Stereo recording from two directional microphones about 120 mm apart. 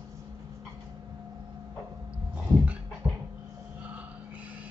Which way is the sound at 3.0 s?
15° right (ahead or behind).